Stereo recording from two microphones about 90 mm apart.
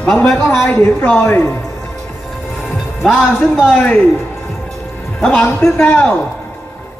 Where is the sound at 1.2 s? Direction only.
25° left (ahead or behind).